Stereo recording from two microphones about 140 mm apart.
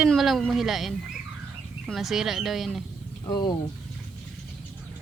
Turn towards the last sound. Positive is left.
turn(degrees=30)  # may be behind; listen again after turning